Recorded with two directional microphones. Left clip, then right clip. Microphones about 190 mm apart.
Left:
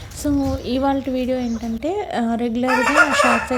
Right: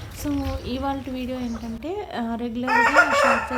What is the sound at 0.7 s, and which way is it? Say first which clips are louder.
A woman's voice: left 8 dB; 30° left (ahead or behind).